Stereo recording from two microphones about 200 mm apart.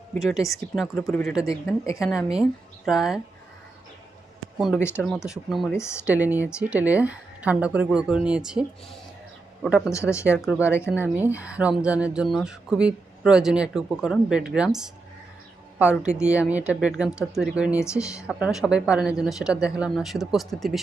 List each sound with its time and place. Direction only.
0.2 s speech: centre (ahead or behind)
4.5 s speech: centre (ahead or behind)
4.8 s speech: 10° left (ahead or behind)
5.0 s speech: centre (ahead or behind)
9.9 s speech: 15° left (ahead or behind)
10.3 s speech: centre (ahead or behind)
10.6 s speech: 10° left (ahead or behind)
11.1 s speech: 10° right (ahead or behind)